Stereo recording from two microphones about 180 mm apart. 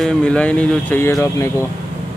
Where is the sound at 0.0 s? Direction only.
5° left (ahead or behind).